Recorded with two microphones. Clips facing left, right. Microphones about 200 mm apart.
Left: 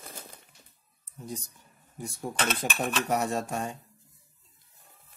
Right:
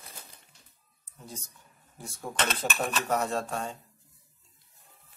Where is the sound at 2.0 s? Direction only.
15° left (ahead or behind).